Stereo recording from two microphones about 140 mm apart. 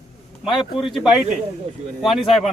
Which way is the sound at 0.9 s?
5° right (ahead or behind).